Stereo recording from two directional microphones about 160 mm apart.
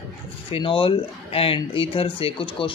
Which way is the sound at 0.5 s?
35° left (ahead or behind).